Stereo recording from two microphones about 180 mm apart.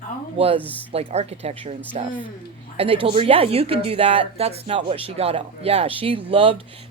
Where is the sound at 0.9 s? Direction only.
35° right (ahead or behind).